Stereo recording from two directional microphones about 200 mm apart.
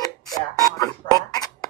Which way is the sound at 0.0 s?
20° left (ahead or behind).